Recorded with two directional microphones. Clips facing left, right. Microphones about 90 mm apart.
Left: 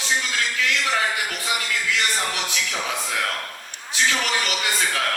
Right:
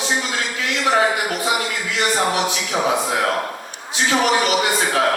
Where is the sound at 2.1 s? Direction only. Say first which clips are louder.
Right 7 dB; 35° right (ahead or behind).